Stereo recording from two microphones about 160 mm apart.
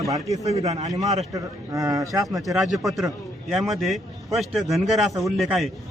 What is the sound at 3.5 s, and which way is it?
A man's voice, centre (ahead or behind).